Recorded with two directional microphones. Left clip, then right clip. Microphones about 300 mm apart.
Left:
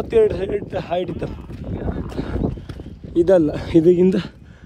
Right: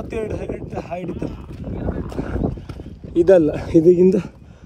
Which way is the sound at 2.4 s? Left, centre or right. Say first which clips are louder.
Even; centre.